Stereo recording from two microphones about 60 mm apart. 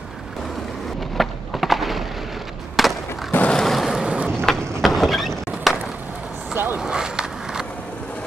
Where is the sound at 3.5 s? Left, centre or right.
Centre.